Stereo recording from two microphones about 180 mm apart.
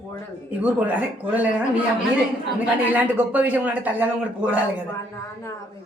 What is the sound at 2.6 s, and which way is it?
Speech, 10° right (ahead or behind).